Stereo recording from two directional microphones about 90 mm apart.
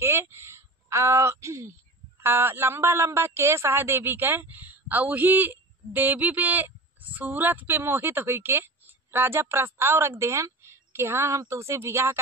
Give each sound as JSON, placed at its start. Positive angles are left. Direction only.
{"t": 0.0, "sound": "a man's voice", "side_deg": -25}